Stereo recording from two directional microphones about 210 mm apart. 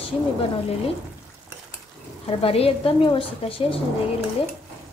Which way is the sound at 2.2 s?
25° left (ahead or behind).